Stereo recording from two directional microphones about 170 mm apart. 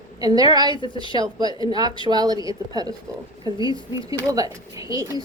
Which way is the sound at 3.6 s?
25° left (ahead or behind).